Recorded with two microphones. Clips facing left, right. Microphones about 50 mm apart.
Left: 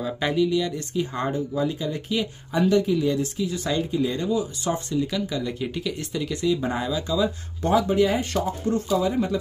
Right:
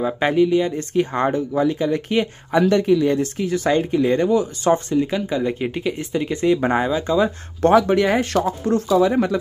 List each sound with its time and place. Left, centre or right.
0.3 s speech: right
0.9 s speech: right
5.0 s speech: right
6.4 s speech: right
6.8 s speech: right
7.8 s speech: right